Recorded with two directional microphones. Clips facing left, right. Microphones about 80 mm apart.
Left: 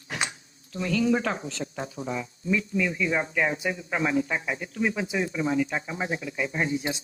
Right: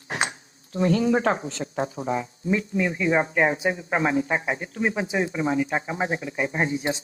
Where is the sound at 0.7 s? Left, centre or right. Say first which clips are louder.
Right 4 dB; right.